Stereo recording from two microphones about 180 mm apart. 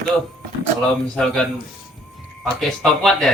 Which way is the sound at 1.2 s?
5° left (ahead or behind).